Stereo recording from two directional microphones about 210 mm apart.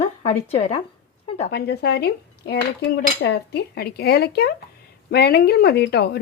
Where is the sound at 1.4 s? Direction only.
50° left (ahead or behind).